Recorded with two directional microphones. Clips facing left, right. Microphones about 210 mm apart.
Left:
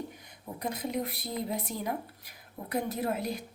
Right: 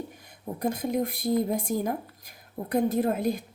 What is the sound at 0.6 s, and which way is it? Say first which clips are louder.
A woman's voice: right 6 dB; 50° right (ahead or behind).